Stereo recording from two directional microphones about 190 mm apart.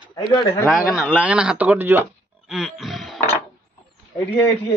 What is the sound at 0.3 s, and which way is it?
Speech, 20° left (ahead or behind).